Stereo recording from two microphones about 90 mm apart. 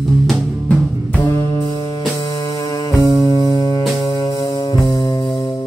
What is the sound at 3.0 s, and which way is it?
Music, 45° left (ahead or behind).